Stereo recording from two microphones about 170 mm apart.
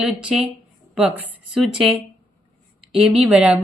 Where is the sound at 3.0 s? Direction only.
5° right (ahead or behind).